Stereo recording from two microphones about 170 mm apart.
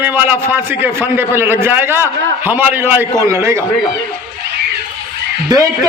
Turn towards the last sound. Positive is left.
turn(degrees=-20)  # may be behind; listen again after turning